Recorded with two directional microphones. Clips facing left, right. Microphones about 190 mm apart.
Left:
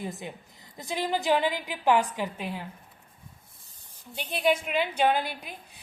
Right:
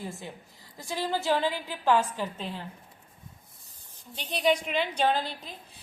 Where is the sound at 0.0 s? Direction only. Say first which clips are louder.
Left 2 dB; 20° left (ahead or behind).